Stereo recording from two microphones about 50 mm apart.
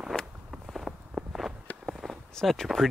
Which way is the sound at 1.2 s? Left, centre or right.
Centre.